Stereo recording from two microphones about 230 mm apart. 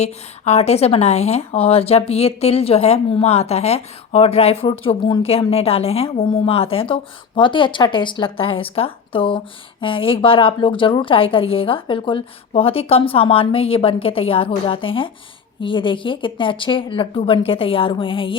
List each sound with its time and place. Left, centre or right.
0.0 s a woman's voice: left